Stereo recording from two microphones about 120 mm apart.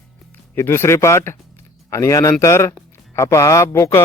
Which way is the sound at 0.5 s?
20° left (ahead or behind).